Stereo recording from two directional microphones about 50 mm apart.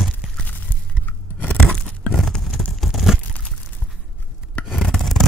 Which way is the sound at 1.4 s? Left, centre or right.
Left.